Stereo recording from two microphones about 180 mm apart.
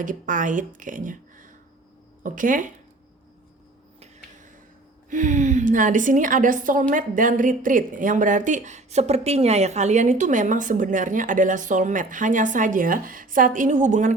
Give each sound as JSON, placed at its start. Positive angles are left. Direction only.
{"t": 0.0, "sound": "speech", "side_deg": -45}
{"t": 5.0, "sound": "speech", "side_deg": -45}